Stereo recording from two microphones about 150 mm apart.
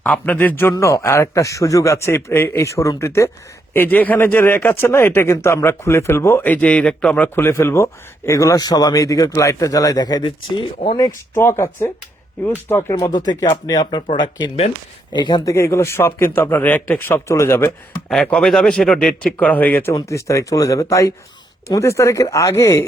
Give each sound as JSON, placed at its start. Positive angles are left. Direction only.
{"t": 0.0, "sound": "a man's voice", "side_deg": 10}
{"t": 10.9, "sound": "a man's voice", "side_deg": 20}
{"t": 15.5, "sound": "speech", "side_deg": 20}
{"t": 18.1, "sound": "a man's voice", "side_deg": 5}